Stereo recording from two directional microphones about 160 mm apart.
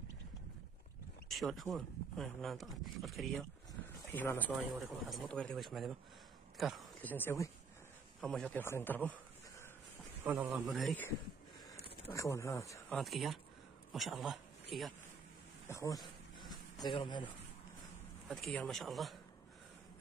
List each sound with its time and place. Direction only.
1.3 s speech: centre (ahead or behind)
3.8 s a sound: 15° left (ahead or behind)
5.1 s speech: 5° left (ahead or behind)
7.0 s speech: 10° left (ahead or behind)
8.2 s a man's voice: 5° left (ahead or behind)
10.2 s a man's voice: 15° right (ahead or behind)
10.7 s speech: centre (ahead or behind)
12.1 s speech: 20° left (ahead or behind)
12.9 s speech: centre (ahead or behind)
15.7 s speech: 20° left (ahead or behind)
18.3 s speech: 5° left (ahead or behind)